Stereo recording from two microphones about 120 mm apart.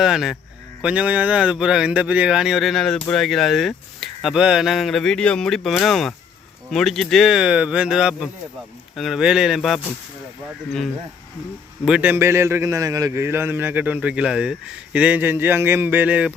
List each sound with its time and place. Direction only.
0.0 s a man's voice: 5° right (ahead or behind)
11.9 s a man's voice: 15° right (ahead or behind)